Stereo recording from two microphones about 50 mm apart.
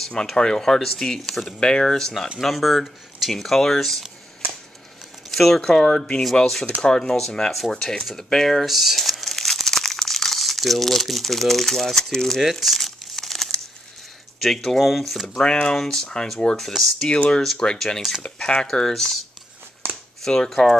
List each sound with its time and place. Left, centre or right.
0.0 s speech: centre
1.6 s speech: centre
5.3 s speech: centre
8.6 s crumpling: centre
12.4 s crumpling: centre
14.4 s speech: centre
15.4 s speech: centre
16.5 s speech: centre
17.1 s speech: centre
17.7 s speech: centre
18.2 s speech: centre
20.2 s speech: centre